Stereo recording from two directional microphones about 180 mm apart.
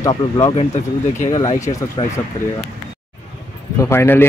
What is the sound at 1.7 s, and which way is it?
Speech, 35° left (ahead or behind).